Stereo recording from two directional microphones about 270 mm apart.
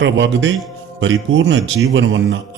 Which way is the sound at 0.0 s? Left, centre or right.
Right.